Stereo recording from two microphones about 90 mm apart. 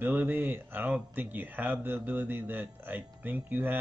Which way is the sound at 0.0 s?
20° right (ahead or behind).